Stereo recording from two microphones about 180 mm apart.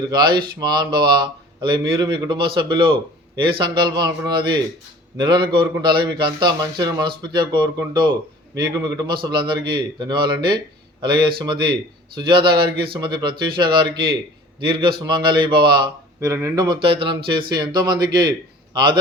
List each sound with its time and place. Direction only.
0.1 s a man's voice: 25° right (ahead or behind)